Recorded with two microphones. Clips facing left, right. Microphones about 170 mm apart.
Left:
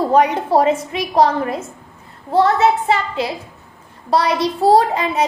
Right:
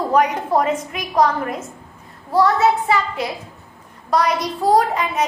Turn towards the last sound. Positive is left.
turn(degrees=30)  # may be behind; listen again after turning